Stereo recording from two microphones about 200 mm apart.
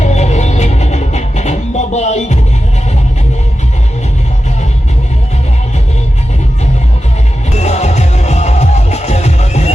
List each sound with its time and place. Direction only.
0.0 s music: 35° left (ahead or behind)
7.5 s music: 35° left (ahead or behind)